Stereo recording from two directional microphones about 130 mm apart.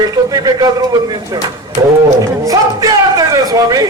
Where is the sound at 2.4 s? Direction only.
25° right (ahead or behind).